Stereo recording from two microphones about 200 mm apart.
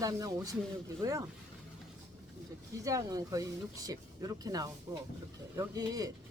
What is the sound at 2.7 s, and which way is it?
A woman's voice, 15° right (ahead or behind).